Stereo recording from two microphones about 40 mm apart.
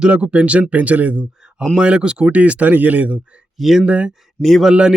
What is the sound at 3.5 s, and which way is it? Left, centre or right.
Speech, centre.